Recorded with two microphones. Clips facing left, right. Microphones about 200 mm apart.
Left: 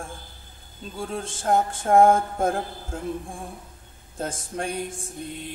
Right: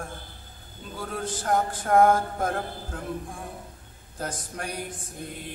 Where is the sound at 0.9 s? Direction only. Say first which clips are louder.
Left 1 dB; 25° left (ahead or behind).